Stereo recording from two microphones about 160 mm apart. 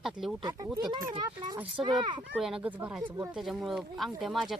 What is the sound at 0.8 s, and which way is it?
A child's voice, 25° right (ahead or behind).